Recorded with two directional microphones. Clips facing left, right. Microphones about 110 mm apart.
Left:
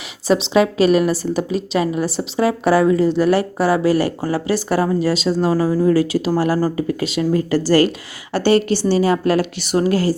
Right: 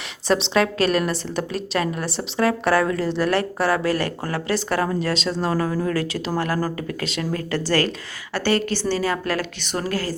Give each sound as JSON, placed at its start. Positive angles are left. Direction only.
{"t": 0.3, "sound": "a woman's voice", "side_deg": 5}